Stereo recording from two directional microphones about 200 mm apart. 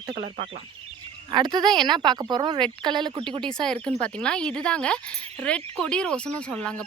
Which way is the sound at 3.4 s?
5° left (ahead or behind).